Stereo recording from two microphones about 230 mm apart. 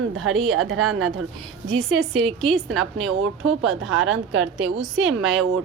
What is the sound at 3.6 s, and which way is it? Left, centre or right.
Speech, centre.